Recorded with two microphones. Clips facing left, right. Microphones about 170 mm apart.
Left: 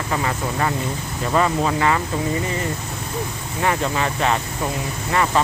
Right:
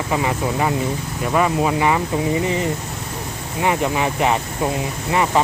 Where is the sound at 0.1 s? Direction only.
15° right (ahead or behind).